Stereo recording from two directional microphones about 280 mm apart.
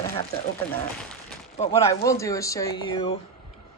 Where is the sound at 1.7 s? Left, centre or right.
Centre.